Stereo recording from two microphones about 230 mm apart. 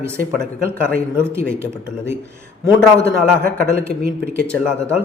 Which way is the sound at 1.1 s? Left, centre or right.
Centre.